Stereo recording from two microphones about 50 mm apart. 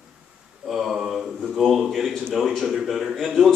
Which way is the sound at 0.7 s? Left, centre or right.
Centre.